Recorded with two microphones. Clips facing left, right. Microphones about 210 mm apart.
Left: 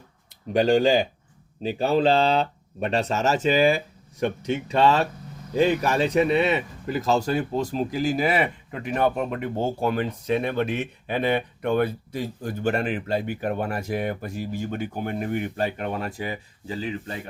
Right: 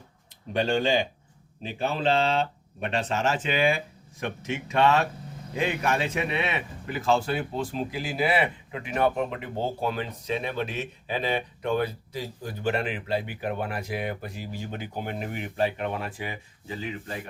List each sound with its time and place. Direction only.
0.6 s speech: 35° left (ahead or behind)